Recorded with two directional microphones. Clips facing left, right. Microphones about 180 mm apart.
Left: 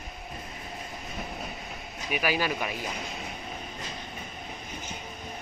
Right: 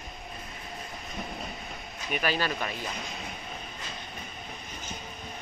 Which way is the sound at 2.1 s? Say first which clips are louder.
Left 1 dB; 10° left (ahead or behind).